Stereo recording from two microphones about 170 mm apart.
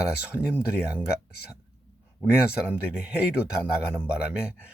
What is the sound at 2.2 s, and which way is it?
Speech, 5° right (ahead or behind).